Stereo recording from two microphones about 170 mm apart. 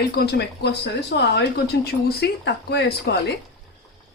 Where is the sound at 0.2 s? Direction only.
80° left.